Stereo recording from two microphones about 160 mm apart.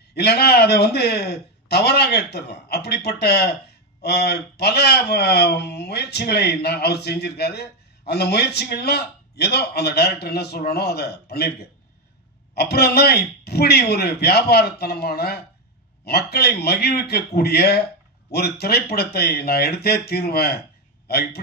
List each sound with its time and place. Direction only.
0.1 s a man's voice: 90° left